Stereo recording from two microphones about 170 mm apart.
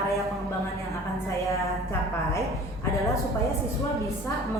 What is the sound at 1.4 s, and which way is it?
Speech, 15° left (ahead or behind).